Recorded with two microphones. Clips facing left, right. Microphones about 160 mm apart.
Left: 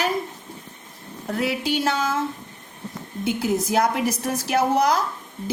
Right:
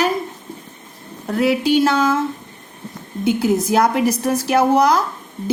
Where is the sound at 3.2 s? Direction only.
80° right.